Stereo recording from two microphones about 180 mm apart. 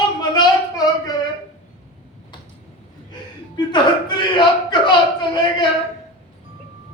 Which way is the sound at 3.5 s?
25° left (ahead or behind).